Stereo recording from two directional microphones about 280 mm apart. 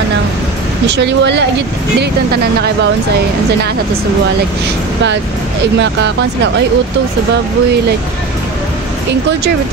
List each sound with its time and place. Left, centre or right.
0.8 s speech: right
5.8 s speech: right